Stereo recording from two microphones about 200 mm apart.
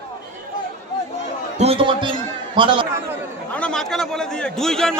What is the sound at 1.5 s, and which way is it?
A man's voice, 30° right (ahead or behind).